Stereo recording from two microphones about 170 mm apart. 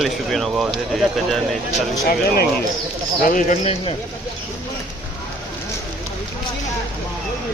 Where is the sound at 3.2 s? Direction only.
50° left (ahead or behind).